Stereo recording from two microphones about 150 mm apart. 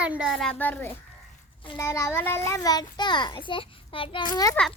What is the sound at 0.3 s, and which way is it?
A child's voice, 5° left (ahead or behind).